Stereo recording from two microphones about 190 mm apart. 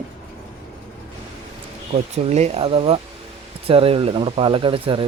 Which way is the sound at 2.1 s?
35° right (ahead or behind).